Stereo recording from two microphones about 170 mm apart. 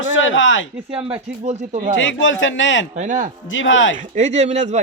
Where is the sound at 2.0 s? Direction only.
90° left.